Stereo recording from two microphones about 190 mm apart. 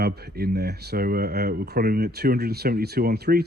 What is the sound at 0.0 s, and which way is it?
Speech, 60° right (ahead or behind).